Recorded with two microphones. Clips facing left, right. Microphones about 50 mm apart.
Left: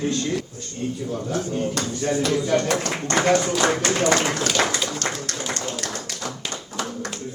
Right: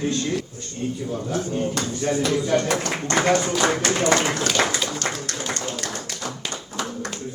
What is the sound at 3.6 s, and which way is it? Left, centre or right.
Speech, centre.